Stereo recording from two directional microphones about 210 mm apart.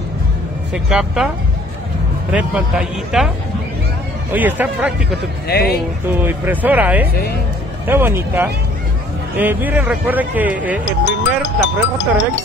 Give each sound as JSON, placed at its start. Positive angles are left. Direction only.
{"t": 0.8, "sound": "a man's voice", "side_deg": -5}
{"t": 2.3, "sound": "a man's voice", "side_deg": -5}
{"t": 4.3, "sound": "speech", "side_deg": -10}
{"t": 5.5, "sound": "speech", "side_deg": 50}
{"t": 6.2, "sound": "speech", "side_deg": -10}
{"t": 11.1, "sound": "speech", "side_deg": 60}